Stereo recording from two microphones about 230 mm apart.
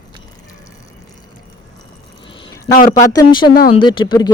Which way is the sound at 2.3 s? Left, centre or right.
Centre.